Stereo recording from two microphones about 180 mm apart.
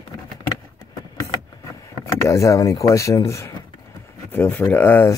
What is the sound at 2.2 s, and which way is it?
Speech, 15° left (ahead or behind).